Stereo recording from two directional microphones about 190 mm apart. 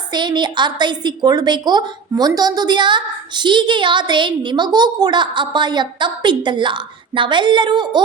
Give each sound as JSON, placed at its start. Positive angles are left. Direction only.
{"t": 0.1, "sound": "a woman's voice", "side_deg": -25}